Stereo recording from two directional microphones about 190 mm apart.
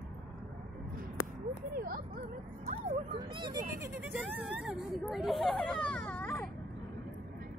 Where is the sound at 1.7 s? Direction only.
50° right (ahead or behind).